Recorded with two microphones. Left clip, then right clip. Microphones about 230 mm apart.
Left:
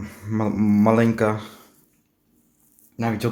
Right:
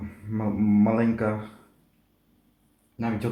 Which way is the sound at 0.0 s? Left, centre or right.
Left.